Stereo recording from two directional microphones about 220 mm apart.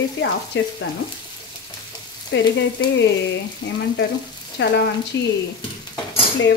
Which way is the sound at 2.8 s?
55° left (ahead or behind).